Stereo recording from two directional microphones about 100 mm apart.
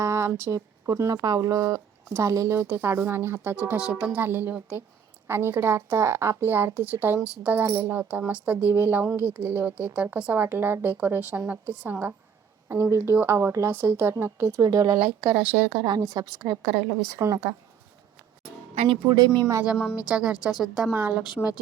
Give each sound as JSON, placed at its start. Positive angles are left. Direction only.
{"t": 0.0, "sound": "a woman's voice", "side_deg": -30}
{"t": 15.3, "sound": "speech", "side_deg": -20}
{"t": 16.0, "sound": "speech", "side_deg": -35}
{"t": 17.2, "sound": "speech", "side_deg": -30}
{"t": 19.0, "sound": "speech", "side_deg": -40}
{"t": 19.6, "sound": "a woman's voice", "side_deg": -5}
{"t": 20.9, "sound": "a woman's voice", "side_deg": -15}